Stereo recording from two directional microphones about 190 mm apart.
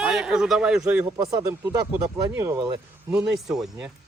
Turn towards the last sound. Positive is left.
turn(degrees=0)  # may be behind; listen again after turning